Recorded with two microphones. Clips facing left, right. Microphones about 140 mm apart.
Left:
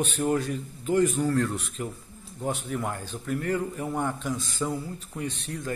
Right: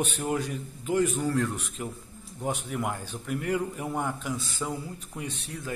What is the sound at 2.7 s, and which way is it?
A man's voice, 10° right (ahead or behind).